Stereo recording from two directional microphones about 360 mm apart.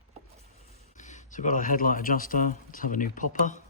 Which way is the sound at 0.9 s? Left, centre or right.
Centre.